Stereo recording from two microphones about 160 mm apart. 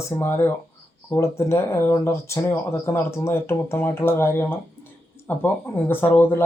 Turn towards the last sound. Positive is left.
turn(degrees=10)  # may be behind; listen again after turning